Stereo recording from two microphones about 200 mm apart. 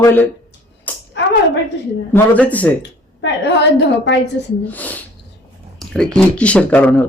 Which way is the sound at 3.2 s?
60° left (ahead or behind).